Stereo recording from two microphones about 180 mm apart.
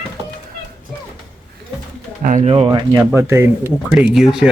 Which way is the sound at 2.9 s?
15° right (ahead or behind).